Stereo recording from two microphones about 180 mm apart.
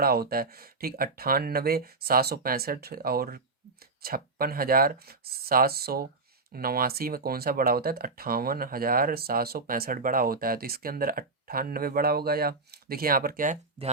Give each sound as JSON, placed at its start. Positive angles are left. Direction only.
{"t": 0.0, "sound": "speech", "side_deg": -60}